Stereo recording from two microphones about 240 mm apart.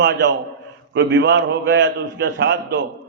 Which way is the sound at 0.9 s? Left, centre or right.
Right.